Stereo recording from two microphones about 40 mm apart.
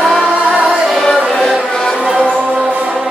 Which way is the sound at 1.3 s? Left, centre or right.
Centre.